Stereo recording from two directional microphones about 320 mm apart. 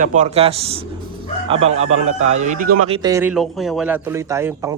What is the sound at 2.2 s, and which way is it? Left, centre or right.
Speech, right.